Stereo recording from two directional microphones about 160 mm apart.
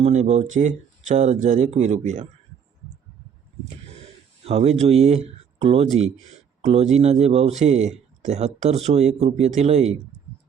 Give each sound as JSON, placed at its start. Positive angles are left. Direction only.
{"t": 0.0, "sound": "speech", "side_deg": -45}
{"t": 4.4, "sound": "speech", "side_deg": -40}